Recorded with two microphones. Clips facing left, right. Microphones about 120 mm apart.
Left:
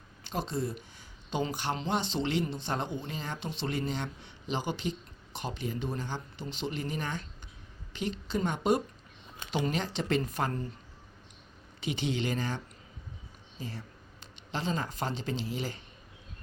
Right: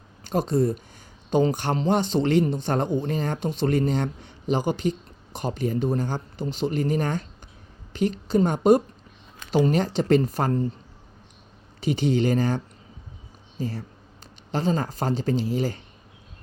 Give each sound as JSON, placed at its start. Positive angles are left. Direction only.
{"t": 0.3, "sound": "speech", "side_deg": -45}
{"t": 11.8, "sound": "speech", "side_deg": -40}